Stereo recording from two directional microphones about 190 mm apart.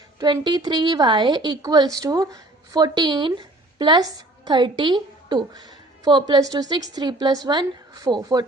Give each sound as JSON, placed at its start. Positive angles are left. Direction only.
{"t": 0.2, "sound": "a woman's voice", "side_deg": -20}